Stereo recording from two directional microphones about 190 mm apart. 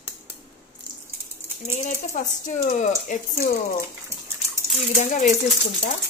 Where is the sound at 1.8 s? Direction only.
40° left (ahead or behind).